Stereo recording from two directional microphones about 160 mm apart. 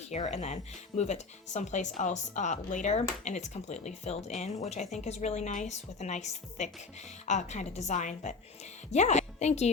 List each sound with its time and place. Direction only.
0.2 s speech: 40° left (ahead or behind)